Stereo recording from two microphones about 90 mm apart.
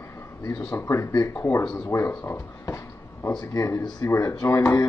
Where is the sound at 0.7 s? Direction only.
30° left (ahead or behind).